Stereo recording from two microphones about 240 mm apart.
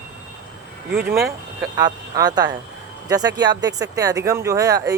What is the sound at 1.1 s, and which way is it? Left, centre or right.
Speech, centre.